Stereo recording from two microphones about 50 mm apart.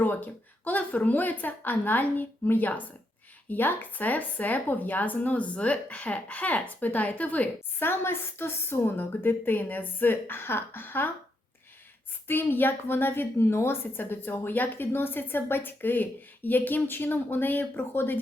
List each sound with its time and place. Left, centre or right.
0.0 s speech: left
7.8 s a woman's voice: left
12.3 s a woman's voice: left